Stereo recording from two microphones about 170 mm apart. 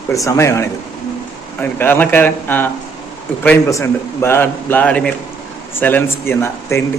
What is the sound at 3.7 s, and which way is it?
A man's voice, 15° left (ahead or behind).